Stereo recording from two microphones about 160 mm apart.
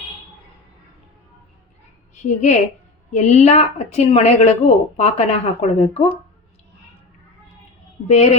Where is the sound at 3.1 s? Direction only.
45° left (ahead or behind).